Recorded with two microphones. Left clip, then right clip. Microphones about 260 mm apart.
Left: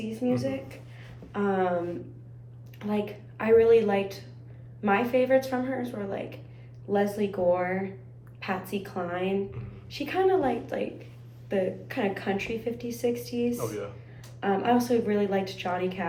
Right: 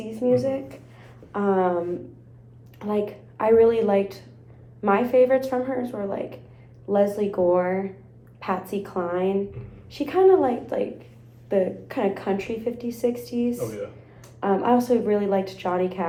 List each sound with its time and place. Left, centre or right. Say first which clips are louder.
0.1 s a woman's voice: right 8 dB; centre
2.7 s a woman's voice: right 5 dB; centre